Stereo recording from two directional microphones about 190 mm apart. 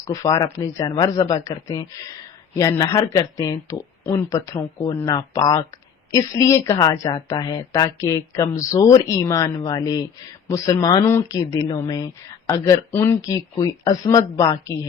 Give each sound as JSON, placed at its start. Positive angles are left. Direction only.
{"t": 0.1, "sound": "speech", "side_deg": 15}